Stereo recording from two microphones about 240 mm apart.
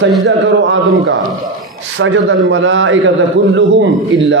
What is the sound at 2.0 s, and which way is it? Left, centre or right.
A man's voice, right.